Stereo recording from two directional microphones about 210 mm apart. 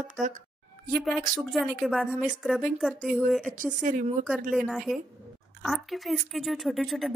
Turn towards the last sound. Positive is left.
turn(degrees=0)  # may be behind; listen again after turning